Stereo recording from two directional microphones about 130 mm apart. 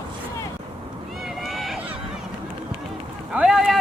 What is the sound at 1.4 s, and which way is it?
Run, centre (ahead or behind).